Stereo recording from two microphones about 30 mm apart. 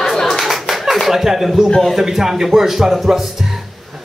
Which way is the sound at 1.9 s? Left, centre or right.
Centre.